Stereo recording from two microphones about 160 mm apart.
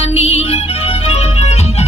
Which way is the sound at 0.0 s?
40° left (ahead or behind).